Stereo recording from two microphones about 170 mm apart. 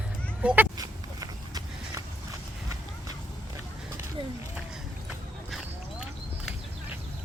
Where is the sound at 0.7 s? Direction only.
20° right (ahead or behind).